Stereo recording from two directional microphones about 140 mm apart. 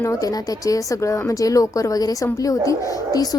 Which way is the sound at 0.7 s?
20° left (ahead or behind).